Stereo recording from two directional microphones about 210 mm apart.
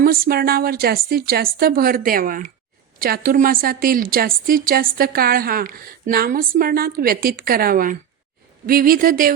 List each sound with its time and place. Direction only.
0.0 s a woman's voice: 45° right (ahead or behind)